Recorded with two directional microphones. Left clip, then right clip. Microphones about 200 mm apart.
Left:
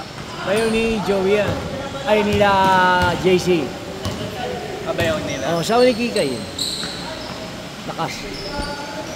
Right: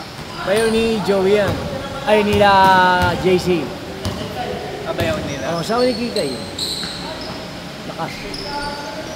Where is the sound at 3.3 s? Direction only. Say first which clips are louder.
Left 1 dB; 15° left (ahead or behind).